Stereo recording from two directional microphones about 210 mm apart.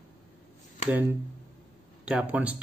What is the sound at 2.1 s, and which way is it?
Speech, 5° right (ahead or behind).